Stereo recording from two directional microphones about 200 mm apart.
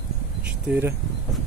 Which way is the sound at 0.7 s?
10° right (ahead or behind).